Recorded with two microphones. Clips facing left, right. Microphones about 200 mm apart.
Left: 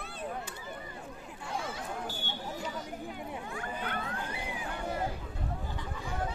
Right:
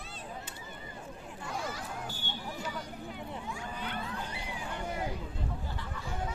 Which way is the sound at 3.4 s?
55° left (ahead or behind).